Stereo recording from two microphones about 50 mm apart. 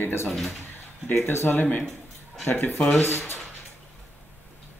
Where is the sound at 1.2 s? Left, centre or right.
Left.